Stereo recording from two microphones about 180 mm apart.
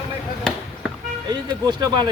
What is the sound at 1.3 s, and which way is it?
Speech, 20° right (ahead or behind).